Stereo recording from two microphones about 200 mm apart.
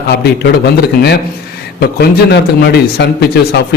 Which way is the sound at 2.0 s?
55° left (ahead or behind).